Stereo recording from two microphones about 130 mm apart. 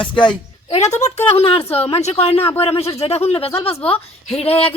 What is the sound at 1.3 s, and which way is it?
Speech, 45° left (ahead or behind).